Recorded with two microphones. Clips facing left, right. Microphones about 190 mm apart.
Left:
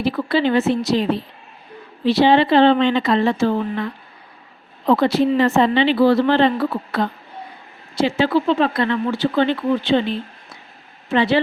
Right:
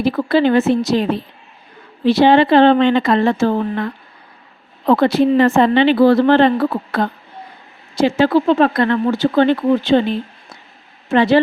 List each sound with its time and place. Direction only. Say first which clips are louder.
0.0 s speech: right 4 dB; 45° right (ahead or behind)
4.9 s speech: right 3 dB; 55° right (ahead or behind)